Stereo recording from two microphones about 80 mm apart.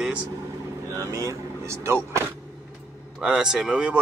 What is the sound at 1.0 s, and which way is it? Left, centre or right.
Speech, right.